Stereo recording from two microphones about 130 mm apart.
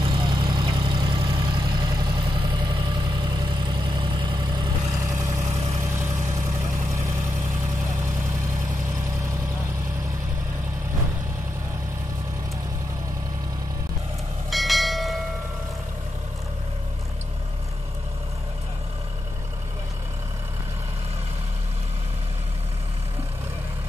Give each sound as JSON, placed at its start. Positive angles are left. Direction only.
{"t": 0.0, "sound": "vehicle", "side_deg": -40}
{"t": 14.5, "sound": "bell", "side_deg": 0}